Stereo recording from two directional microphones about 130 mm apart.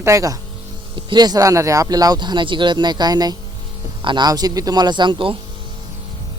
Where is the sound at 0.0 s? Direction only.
25° right (ahead or behind); by 5.4 s 40° right (ahead or behind).